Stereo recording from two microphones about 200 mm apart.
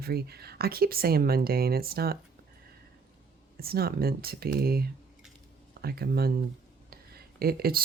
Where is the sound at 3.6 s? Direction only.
50° right (ahead or behind).